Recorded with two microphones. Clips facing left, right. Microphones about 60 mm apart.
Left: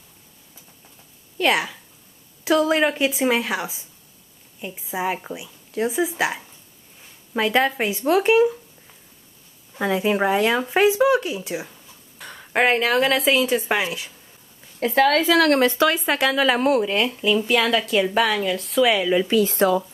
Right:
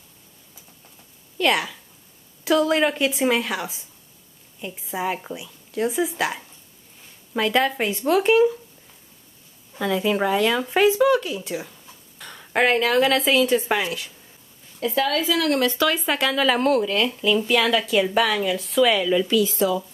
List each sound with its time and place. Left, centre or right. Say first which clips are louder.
1.4 s speech: left 1 dB; centre
9.9 s speech: left 1 dB; centre
14.8 s a woman's voice: left 5 dB; left
15.6 s speech: left 3 dB; left
15.9 s speech: left 2 dB; centre
19.5 s a woman's voice: left 3 dB; left